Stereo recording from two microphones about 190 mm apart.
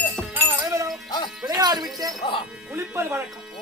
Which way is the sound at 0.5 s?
10° right (ahead or behind).